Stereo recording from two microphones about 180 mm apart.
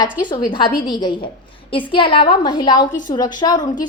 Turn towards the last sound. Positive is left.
turn(degrees=20)  # may be behind; listen again after turning